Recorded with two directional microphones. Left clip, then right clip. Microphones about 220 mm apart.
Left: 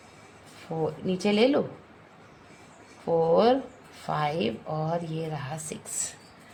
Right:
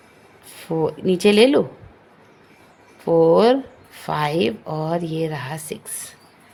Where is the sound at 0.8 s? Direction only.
40° right (ahead or behind).